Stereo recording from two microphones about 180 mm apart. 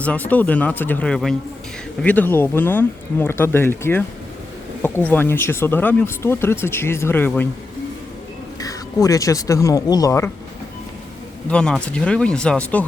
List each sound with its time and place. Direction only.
0.0 s speech: 10° left (ahead or behind)
8.5 s speech: 20° left (ahead or behind)
11.4 s speech: 5° left (ahead or behind)